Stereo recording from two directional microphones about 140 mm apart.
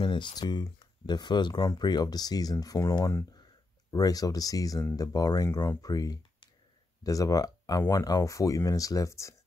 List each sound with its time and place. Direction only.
0.0 s speech: 35° left (ahead or behind)